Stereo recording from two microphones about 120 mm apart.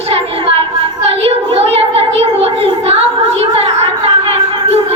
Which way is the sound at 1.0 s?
55° right (ahead or behind).